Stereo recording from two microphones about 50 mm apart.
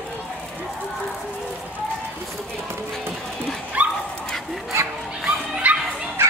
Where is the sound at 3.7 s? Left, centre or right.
Right.